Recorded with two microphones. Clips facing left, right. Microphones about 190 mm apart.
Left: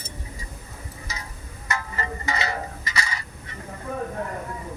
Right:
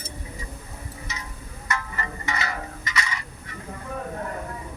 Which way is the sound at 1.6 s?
25° left (ahead or behind).